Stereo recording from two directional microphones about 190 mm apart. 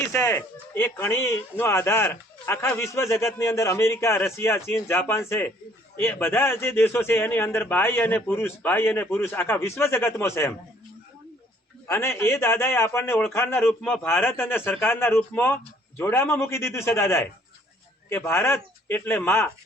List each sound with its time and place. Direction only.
0.1 s speech: 15° left (ahead or behind)
11.9 s speech: 10° left (ahead or behind)